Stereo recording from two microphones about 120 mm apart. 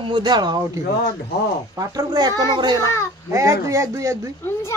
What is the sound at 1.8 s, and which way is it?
A woman's voice, 30° right (ahead or behind).